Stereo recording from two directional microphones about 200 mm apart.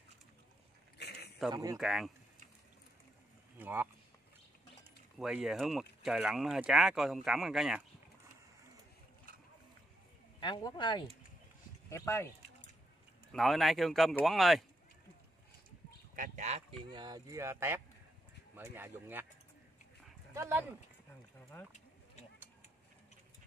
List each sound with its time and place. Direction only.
0.9 s a sound: 55° left (ahead or behind)
1.5 s speech: 15° right (ahead or behind)
1.8 s speech: centre (ahead or behind)
3.5 s speech: 10° right (ahead or behind)
5.2 s speech: 5° right (ahead or behind)
10.4 s speech: 25° left (ahead or behind)
13.3 s speech: centre (ahead or behind)
16.2 s speech: 35° right (ahead or behind)
16.9 s speech: 20° right (ahead or behind)
20.3 s speech: 10° right (ahead or behind)
21.5 s speech: 10° left (ahead or behind)